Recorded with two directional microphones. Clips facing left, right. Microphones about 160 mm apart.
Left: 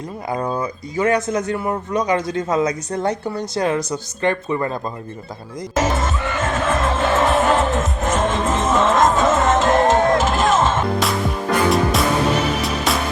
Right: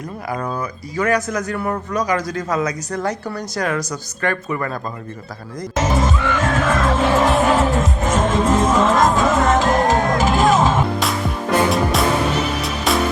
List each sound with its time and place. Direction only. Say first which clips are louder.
0.3 s speech: left 2 dB; 25° left (ahead or behind)
5.9 s music: right 3 dB; centre (ahead or behind)